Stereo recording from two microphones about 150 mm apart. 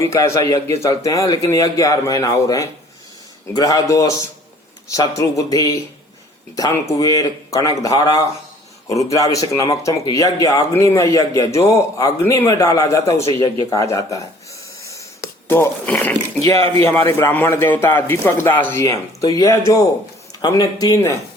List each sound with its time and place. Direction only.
0.0 s speech: 20° left (ahead or behind)